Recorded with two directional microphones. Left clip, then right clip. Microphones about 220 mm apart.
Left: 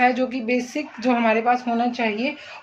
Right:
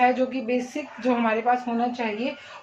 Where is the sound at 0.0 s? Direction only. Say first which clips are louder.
Left 1 dB; 50° left (ahead or behind).